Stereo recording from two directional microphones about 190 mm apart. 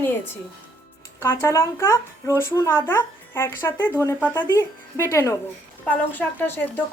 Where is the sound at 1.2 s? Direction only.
15° left (ahead or behind).